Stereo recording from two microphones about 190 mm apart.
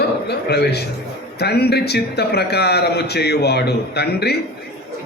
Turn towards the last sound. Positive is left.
turn(degrees=60)  # may be behind; listen again after turning